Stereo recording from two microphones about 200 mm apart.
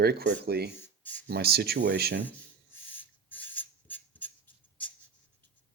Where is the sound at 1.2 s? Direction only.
50° right (ahead or behind).